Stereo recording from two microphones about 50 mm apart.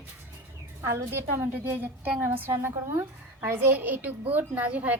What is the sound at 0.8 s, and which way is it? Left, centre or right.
Speech, right.